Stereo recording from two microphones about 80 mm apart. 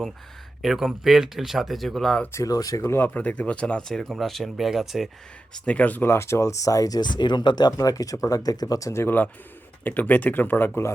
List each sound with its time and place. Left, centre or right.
0.6 s speech: centre
2.3 s speech: left
2.8 s speech: left
3.1 s speech: centre
5.6 s speech: centre
6.1 s speech: left
8.9 s speech: left